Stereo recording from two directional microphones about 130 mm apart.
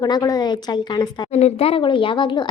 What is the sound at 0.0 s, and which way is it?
Speech, 30° left (ahead or behind).